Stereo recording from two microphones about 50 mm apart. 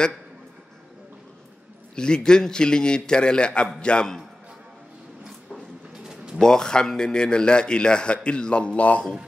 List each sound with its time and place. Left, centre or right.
2.0 s a man's voice: centre
6.4 s a man's voice: centre